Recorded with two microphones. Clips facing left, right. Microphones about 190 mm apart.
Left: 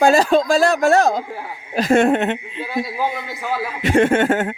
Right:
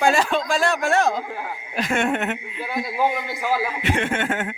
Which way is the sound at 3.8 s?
40° left (ahead or behind).